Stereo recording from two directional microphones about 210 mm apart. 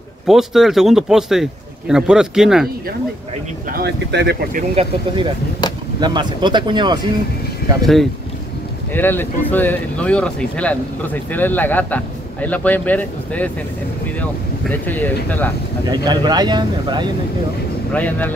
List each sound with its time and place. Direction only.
0.3 s speech: centre (ahead or behind)
3.7 s speech: 50° right (ahead or behind)
5.9 s speech: 20° right (ahead or behind)
7.8 s speech: centre (ahead or behind)
14.6 s speech: 5° left (ahead or behind)
15.9 s speech: 20° right (ahead or behind)
17.9 s speech: 10° left (ahead or behind)